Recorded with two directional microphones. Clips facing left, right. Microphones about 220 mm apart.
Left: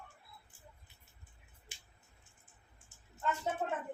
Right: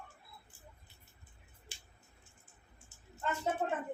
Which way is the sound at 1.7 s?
20° left (ahead or behind).